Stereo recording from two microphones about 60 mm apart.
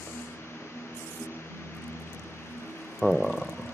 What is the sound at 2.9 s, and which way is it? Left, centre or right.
Frog, centre.